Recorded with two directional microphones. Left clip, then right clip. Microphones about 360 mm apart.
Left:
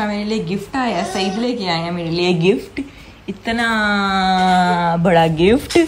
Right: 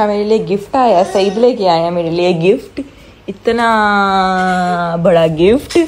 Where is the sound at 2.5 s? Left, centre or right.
Left.